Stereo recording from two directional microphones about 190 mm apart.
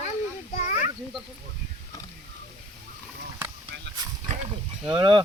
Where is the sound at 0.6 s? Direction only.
40° left (ahead or behind).